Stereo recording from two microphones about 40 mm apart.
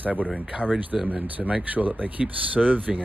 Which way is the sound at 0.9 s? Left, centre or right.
Centre.